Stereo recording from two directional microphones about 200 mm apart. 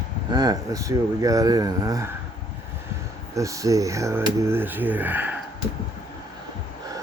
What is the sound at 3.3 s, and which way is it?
Speech, 15° right (ahead or behind).